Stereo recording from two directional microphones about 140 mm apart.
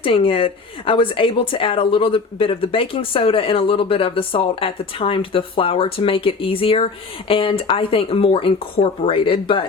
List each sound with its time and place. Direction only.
0.0 s speech: 40° left (ahead or behind)